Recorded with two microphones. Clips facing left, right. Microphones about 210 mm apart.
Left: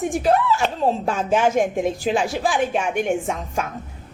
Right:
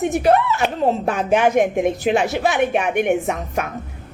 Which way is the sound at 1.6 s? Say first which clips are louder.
Right 3 dB; 15° right (ahead or behind).